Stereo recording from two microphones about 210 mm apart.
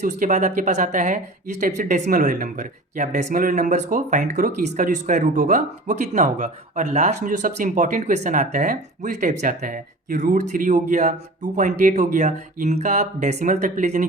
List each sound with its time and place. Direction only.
0.0 s speech: 35° right (ahead or behind)